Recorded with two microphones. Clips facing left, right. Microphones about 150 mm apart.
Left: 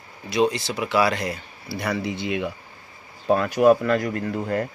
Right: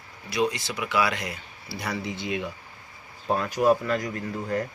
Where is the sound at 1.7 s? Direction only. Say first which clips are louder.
Left 5 dB; 60° left (ahead or behind).